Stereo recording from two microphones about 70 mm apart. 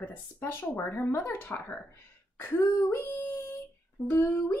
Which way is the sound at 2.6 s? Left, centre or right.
Left.